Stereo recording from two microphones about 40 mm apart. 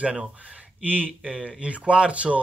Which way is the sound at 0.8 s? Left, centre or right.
Right.